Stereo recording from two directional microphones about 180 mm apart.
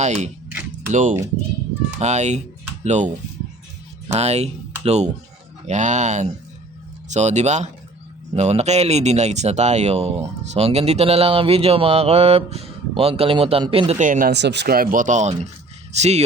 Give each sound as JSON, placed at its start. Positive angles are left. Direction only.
{"t": 0.0, "sound": "speech", "side_deg": -40}
{"t": 4.1, "sound": "speech", "side_deg": -35}
{"t": 14.0, "sound": "speech", "side_deg": -50}
{"t": 14.3, "sound": "speech", "side_deg": -70}